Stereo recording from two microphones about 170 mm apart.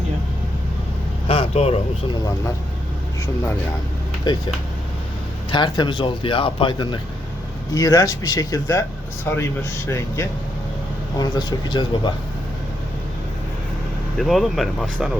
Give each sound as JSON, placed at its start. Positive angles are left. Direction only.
{"t": 1.3, "sound": "vehicle", "side_deg": 35}
{"t": 4.3, "sound": "speech", "side_deg": 25}
{"t": 5.5, "sound": "speech", "side_deg": 25}
{"t": 14.2, "sound": "speech", "side_deg": 0}